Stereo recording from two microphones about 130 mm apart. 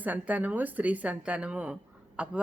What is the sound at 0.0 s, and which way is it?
Speech, 10° right (ahead or behind).